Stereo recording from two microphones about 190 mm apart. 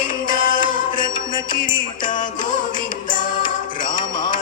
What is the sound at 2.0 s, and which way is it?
Music, 45° left (ahead or behind).